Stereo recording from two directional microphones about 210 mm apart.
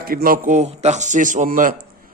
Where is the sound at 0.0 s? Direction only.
45° right (ahead or behind).